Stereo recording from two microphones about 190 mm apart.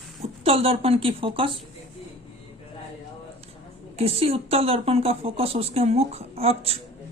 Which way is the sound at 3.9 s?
30° right (ahead or behind).